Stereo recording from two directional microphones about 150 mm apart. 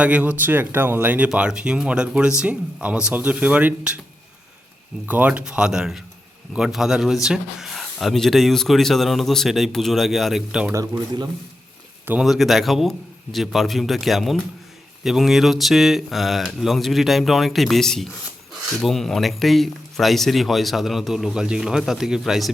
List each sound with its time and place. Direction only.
0.0 s speech: 10° right (ahead or behind)
5.0 s speech: 10° right (ahead or behind)
10.7 s speech: 20° right (ahead or behind)
12.0 s speech: 5° right (ahead or behind)